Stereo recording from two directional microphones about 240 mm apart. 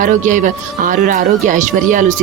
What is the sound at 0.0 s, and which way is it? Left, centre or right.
A woman's voice, right.